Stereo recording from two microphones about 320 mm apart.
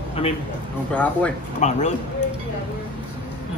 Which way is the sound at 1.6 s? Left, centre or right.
Left.